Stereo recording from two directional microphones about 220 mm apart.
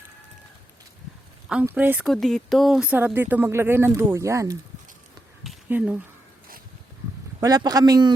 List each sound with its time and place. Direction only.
1.5 s speech: 5° right (ahead or behind)
5.4 s a sound: 5° right (ahead or behind)
7.4 s speech: 15° right (ahead or behind)